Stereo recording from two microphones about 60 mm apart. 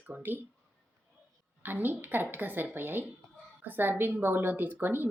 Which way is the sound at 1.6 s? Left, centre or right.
Right.